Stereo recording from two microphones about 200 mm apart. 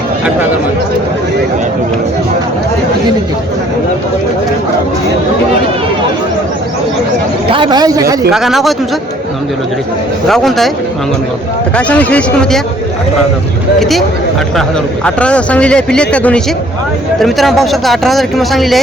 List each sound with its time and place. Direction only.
7.5 s a man's voice: 20° right (ahead or behind)
8.3 s speech: centre (ahead or behind)
10.2 s speech: centre (ahead or behind)
11.8 s a man's voice: 5° left (ahead or behind)
13.7 s speech: centre (ahead or behind)
15.0 s speech: 5° left (ahead or behind)